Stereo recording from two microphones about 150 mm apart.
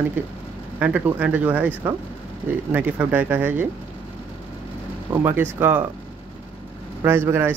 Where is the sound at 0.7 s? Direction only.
10° right (ahead or behind).